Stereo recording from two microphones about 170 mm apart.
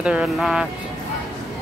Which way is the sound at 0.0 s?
5° right (ahead or behind).